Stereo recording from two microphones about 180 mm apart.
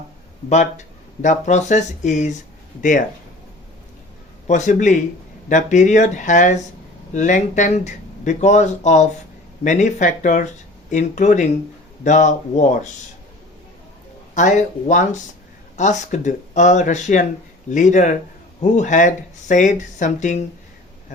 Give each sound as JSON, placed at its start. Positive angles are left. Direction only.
{"t": 0.5, "sound": "speech", "side_deg": 40}
{"t": 4.4, "sound": "speech", "side_deg": 40}
{"t": 14.3, "sound": "speech", "side_deg": 45}